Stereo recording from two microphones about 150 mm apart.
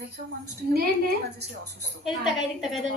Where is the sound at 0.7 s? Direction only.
90° right.